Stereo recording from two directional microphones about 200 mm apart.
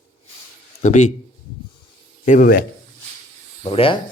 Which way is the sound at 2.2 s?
40° left (ahead or behind).